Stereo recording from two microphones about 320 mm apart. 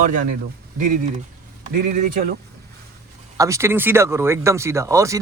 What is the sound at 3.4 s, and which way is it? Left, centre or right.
Speech, centre.